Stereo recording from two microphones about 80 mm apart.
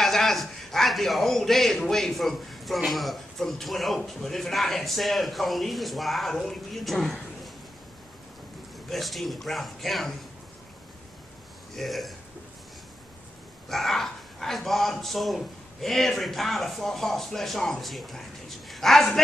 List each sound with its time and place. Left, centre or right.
0.0 s a man's voice: centre
8.8 s a man's voice: centre
11.7 s a man's voice: centre
13.7 s a man's voice: centre